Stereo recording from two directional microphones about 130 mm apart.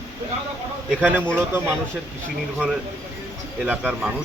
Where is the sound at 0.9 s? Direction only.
15° right (ahead or behind).